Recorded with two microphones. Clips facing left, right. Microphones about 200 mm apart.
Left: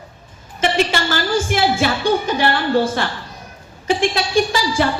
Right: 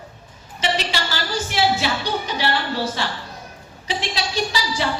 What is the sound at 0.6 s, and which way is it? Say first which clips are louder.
A woman's voice: left 6 dB; 50° left (ahead or behind).